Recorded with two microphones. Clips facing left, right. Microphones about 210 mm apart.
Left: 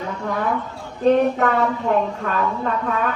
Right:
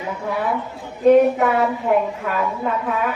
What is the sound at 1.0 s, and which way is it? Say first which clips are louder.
A woman's voice: right 3 dB; 15° right (ahead or behind).